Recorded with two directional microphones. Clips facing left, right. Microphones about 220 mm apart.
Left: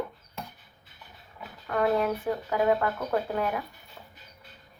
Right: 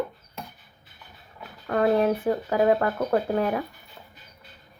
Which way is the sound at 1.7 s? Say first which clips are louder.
Right 4 dB; 35° right (ahead or behind).